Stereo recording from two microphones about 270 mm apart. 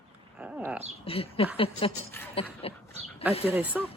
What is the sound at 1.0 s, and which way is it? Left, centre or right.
Speech, left.